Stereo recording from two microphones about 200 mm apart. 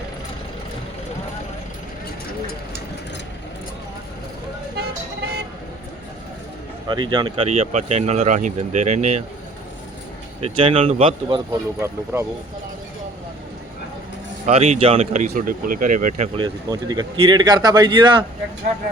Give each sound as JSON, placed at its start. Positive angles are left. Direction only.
{"t": 4.8, "sound": "music", "side_deg": -55}
{"t": 6.8, "sound": "speech", "side_deg": -20}
{"t": 10.4, "sound": "speech", "side_deg": -30}
{"t": 12.1, "sound": "speech", "side_deg": -10}
{"t": 14.4, "sound": "speech", "side_deg": -35}
{"t": 16.4, "sound": "speech", "side_deg": -20}